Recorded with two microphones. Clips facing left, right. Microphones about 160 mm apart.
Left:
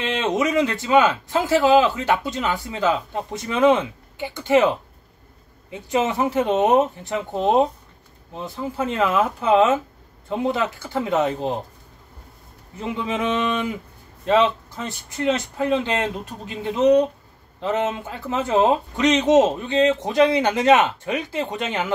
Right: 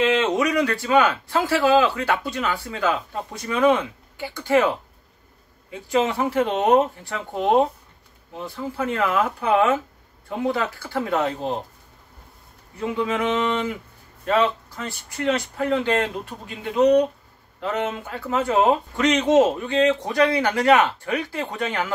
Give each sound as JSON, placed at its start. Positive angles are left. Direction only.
{"t": 0.3, "sound": "speech", "side_deg": 20}
{"t": 12.8, "sound": "speech", "side_deg": 20}
{"t": 14.2, "sound": "speech", "side_deg": 20}